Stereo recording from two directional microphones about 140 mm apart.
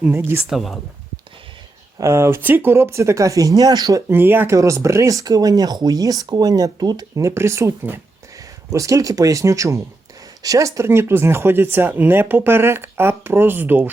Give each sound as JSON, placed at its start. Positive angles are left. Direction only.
{"t": 0.0, "sound": "speech", "side_deg": -15}
{"t": 0.5, "sound": "speech", "side_deg": 0}
{"t": 2.0, "sound": "speech", "side_deg": -20}